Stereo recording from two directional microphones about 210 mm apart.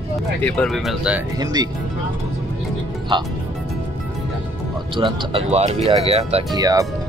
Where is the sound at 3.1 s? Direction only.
25° right (ahead or behind).